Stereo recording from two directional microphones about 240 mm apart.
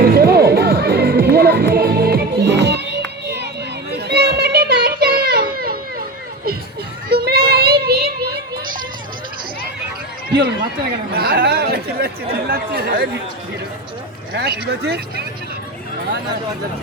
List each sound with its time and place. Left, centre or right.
0.0 s music: right
3.9 s children playing: right
7.1 s child singing: right
11.1 s chatter: right
14.3 s speech: right